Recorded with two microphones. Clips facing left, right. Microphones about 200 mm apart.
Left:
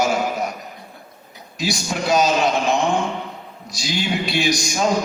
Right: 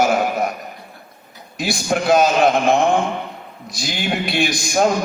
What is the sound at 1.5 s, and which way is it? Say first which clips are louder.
A man's voice: right 4 dB; 55° right (ahead or behind).